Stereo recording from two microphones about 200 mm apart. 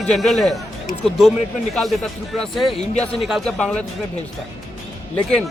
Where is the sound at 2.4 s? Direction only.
Centre (ahead or behind).